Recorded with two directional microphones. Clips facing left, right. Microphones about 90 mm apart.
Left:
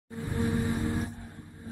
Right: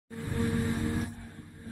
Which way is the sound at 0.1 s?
15° left (ahead or behind).